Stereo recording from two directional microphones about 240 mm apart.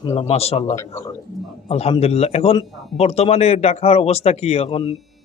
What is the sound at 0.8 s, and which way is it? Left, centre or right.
Speech, centre.